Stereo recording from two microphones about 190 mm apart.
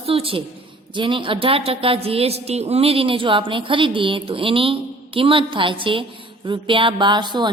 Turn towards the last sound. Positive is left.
turn(degrees=-25)  # may be behind; listen again after turning